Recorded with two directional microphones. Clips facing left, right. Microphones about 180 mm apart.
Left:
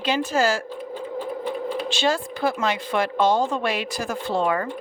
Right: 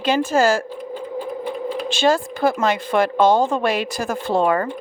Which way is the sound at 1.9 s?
50° right (ahead or behind).